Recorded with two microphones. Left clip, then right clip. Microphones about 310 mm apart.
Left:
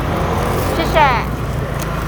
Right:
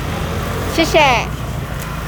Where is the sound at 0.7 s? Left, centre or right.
Right.